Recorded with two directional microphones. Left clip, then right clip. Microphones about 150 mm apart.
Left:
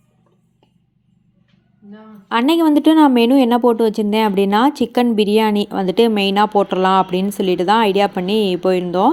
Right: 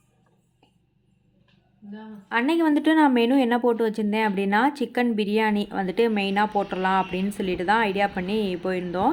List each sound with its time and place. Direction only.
2.3 s speech: 45° left (ahead or behind)